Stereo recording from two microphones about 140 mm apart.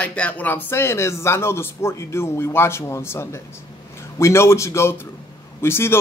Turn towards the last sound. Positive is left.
turn(degrees=15)  # may be behind; listen again after turning